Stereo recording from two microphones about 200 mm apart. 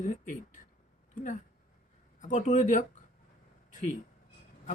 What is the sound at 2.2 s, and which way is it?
Speech, 40° left (ahead or behind).